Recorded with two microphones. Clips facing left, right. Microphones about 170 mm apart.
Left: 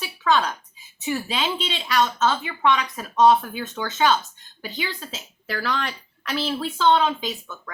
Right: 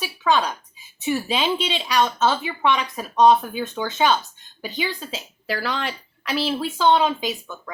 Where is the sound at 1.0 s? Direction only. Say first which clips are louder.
Right 3 dB; 20° right (ahead or behind).